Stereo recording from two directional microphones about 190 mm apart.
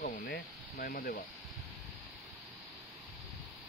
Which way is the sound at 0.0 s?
50° left (ahead or behind).